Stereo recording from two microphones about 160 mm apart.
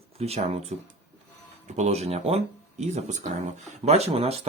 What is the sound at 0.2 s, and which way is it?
Speech, 40° right (ahead or behind).